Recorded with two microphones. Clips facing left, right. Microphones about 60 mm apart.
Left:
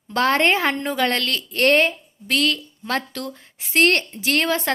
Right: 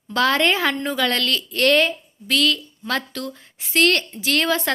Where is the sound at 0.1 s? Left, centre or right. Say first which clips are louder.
Left 1 dB; left.